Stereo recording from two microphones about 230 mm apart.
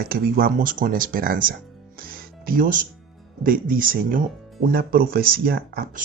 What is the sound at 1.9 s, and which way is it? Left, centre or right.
Music, right.